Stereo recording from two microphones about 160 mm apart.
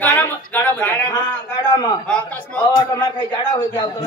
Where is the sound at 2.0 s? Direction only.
5° left (ahead or behind).